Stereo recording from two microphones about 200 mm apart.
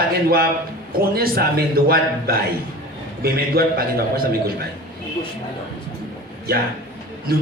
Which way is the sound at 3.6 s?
50° right (ahead or behind).